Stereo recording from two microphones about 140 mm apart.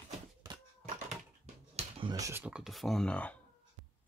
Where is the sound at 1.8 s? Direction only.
50° right (ahead or behind).